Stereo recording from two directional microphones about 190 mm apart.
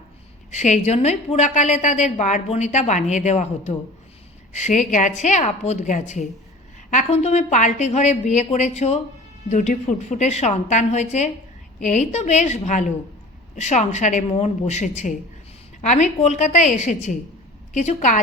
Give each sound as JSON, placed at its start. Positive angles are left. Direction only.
{"t": 0.5, "sound": "a woman's voice", "side_deg": 40}